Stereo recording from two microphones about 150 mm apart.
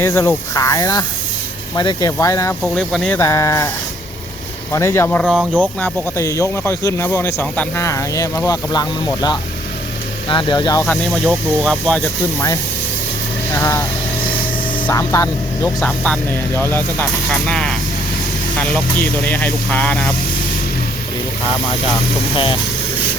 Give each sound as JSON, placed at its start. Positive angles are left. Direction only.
{"t": 0.0, "sound": "speech", "side_deg": 15}
{"t": 2.7, "sound": "speech", "side_deg": 0}
{"t": 3.1, "sound": "speech", "side_deg": 20}
{"t": 4.7, "sound": "speech", "side_deg": 20}
{"t": 5.2, "sound": "speech", "side_deg": -5}
{"t": 5.8, "sound": "speech", "side_deg": 20}
{"t": 10.8, "sound": "speech", "side_deg": 0}
{"t": 13.5, "sound": "speech", "side_deg": 20}
{"t": 14.8, "sound": "speech", "side_deg": 20}
{"t": 15.8, "sound": "speech", "side_deg": 10}